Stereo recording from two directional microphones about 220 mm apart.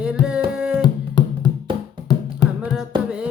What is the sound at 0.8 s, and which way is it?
Music, 20° left (ahead or behind).